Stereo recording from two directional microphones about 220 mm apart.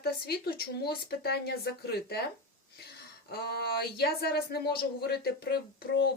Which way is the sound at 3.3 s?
45° left (ahead or behind).